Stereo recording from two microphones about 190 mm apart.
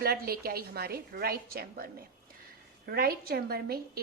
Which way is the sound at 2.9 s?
50° right (ahead or behind).